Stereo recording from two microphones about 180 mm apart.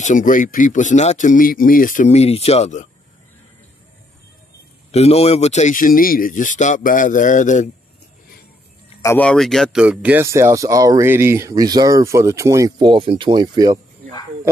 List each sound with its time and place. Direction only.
0.0 s speech: 45° left (ahead or behind)
4.9 s speech: 35° left (ahead or behind)
9.0 s speech: 10° left (ahead or behind); by 13.7 s 20° right (ahead or behind)